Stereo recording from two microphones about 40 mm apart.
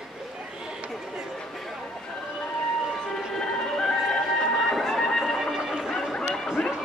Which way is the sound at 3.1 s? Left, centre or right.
Centre.